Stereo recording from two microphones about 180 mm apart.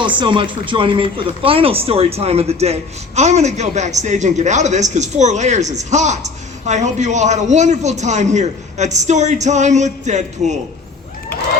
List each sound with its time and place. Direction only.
0.0 s a man's voice: 25° right (ahead or behind)